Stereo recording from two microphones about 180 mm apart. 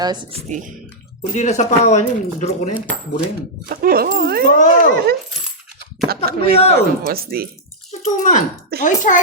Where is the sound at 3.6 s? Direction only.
55° right (ahead or behind).